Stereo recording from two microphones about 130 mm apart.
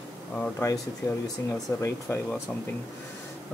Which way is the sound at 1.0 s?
25° left (ahead or behind).